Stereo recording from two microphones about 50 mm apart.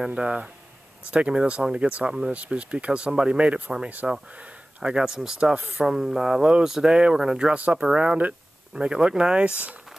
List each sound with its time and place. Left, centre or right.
0.0 s speech: centre
2.0 s speech: centre; by 4.1 s right
4.8 s speech: centre